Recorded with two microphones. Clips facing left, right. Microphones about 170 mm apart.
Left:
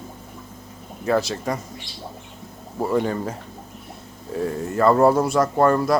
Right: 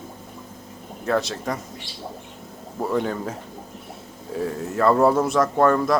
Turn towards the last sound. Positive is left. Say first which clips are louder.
# left 1 dB
turn(degrees=0)  # may be behind; listen again after turning